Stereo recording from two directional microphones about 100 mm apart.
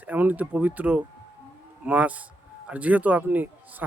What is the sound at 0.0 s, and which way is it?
Speech, 15° right (ahead or behind).